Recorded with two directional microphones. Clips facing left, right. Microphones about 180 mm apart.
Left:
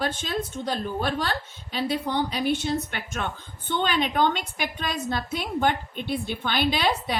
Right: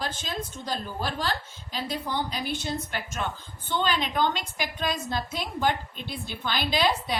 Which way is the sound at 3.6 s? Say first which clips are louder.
Left 2 dB; 55° left (ahead or behind).